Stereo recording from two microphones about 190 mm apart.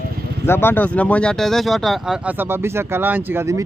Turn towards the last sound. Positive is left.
turn(degrees=-15)  # may be behind; listen again after turning